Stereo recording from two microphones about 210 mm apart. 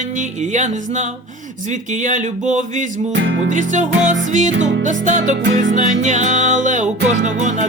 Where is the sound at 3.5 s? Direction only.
35° right (ahead or behind).